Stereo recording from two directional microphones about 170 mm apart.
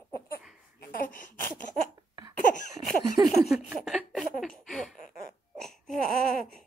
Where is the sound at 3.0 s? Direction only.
25° right (ahead or behind).